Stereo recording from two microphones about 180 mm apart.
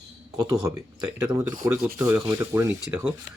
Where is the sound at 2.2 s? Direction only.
15° right (ahead or behind).